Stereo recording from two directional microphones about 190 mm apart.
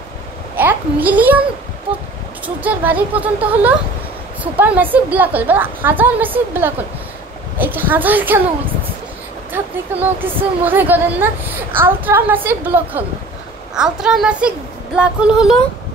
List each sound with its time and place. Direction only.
0.6 s a child's voice: 10° right (ahead or behind)
2.4 s a woman's voice: 10° right (ahead or behind)
9.5 s a woman's voice: 10° right (ahead or behind)